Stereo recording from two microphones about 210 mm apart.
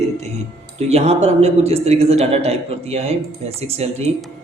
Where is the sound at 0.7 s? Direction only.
30° right (ahead or behind).